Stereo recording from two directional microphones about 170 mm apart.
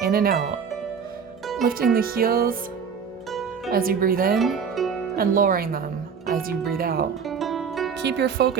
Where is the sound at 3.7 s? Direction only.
60° right (ahead or behind).